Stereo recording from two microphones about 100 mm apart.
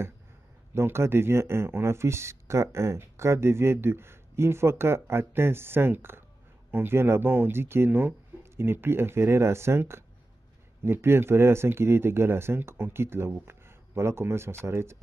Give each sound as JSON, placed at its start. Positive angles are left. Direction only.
{"t": 0.7, "sound": "speech", "side_deg": -25}